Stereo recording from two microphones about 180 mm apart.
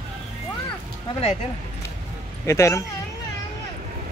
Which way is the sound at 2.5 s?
15° left (ahead or behind).